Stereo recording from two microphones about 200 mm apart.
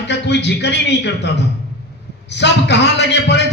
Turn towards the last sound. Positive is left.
turn(degrees=60)  # may be behind; listen again after turning